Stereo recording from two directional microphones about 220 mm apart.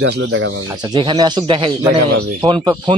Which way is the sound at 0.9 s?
20° right (ahead or behind).